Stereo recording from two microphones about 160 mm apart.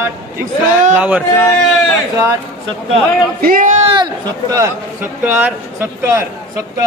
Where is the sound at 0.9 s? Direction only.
10° right (ahead or behind).